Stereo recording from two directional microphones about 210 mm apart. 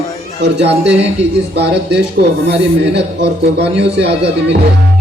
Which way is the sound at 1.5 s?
50° right (ahead or behind).